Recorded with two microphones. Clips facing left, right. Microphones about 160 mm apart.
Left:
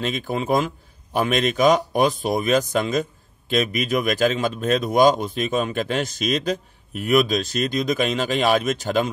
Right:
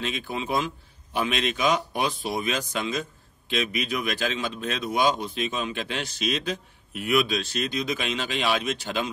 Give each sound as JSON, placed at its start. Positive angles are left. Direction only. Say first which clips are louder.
{"t": 0.0, "sound": "a man's voice", "louder": "left 6 dB", "side_deg": 45}